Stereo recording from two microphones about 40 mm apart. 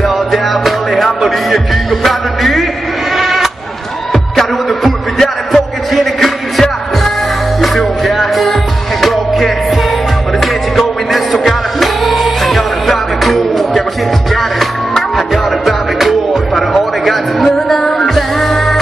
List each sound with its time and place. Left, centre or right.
0.0 s music: centre
3.2 s bleat: centre
4.1 s music: centre
7.6 s music: centre
17.6 s music: centre